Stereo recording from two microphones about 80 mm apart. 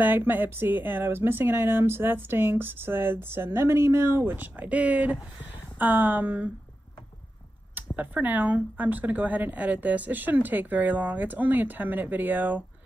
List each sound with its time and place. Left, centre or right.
0.0 s speech: right
7.7 s speech: right